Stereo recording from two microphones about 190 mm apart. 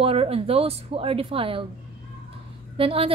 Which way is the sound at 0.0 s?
30° right (ahead or behind).